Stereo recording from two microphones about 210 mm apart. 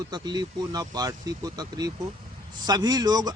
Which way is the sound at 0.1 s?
20° right (ahead or behind).